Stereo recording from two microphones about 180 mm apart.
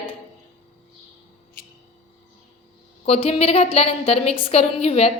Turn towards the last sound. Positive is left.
turn(degrees=35)  # may be behind; listen again after turning